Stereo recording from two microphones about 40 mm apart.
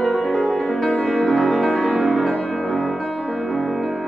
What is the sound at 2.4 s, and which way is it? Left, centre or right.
Music, centre.